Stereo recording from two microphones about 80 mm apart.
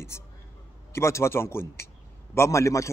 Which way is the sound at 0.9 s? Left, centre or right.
Left.